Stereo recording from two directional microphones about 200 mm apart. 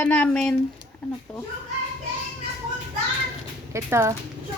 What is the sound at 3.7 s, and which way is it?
Speech, 15° right (ahead or behind).